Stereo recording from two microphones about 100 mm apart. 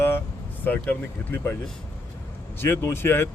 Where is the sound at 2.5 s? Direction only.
25° left (ahead or behind).